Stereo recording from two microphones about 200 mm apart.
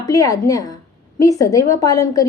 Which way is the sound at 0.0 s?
15° left (ahead or behind).